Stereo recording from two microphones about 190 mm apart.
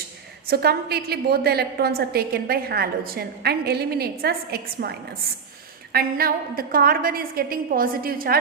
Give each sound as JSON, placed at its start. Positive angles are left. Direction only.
{"t": 0.4, "sound": "a woman's voice", "side_deg": -55}